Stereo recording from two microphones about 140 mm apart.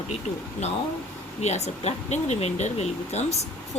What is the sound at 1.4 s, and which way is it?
Speech, 55° left (ahead or behind).